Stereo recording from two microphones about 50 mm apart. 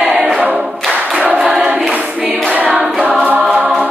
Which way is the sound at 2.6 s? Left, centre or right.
Centre.